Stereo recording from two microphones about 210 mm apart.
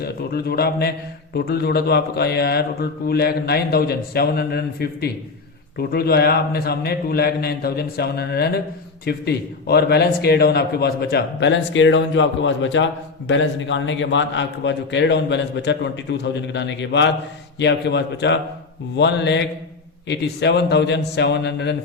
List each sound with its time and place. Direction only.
0.0 s a man's voice: 45° left (ahead or behind)